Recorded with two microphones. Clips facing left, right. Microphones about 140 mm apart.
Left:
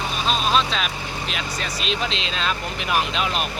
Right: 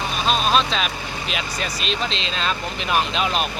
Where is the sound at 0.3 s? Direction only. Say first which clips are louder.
Right 2 dB; centre (ahead or behind).